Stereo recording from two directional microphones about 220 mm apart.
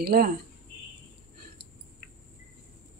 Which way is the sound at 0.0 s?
45° right (ahead or behind).